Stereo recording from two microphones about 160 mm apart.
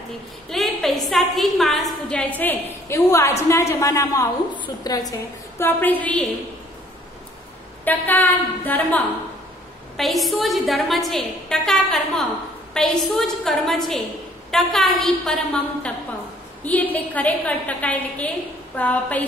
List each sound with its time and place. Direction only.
0.5 s a woman's voice: centre (ahead or behind); by 5.1 s 25° left (ahead or behind)
5.6 s a woman's voice: 10° left (ahead or behind)
7.8 s a woman's voice: 10° left (ahead or behind)
9.9 s a woman's voice: centre (ahead or behind)